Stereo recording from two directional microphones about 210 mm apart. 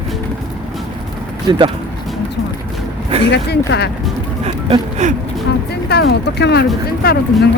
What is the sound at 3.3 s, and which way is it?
Speech, 50° left (ahead or behind).